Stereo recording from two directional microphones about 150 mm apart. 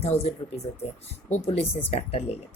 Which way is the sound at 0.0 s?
45° left (ahead or behind).